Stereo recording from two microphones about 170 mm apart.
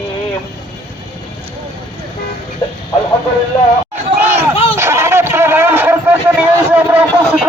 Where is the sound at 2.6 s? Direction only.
20° left (ahead or behind).